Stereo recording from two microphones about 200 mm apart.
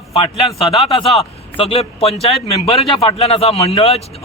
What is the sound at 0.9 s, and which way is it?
A man's voice, 30° left (ahead or behind).